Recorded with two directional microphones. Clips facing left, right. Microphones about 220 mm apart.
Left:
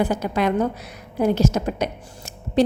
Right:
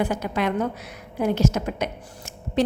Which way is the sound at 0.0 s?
35° left (ahead or behind).